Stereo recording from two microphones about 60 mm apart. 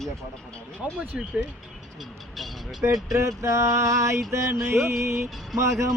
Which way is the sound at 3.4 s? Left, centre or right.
Right.